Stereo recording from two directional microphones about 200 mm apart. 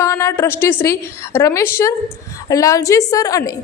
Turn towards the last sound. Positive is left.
turn(degrees=15)  # may be behind; listen again after turning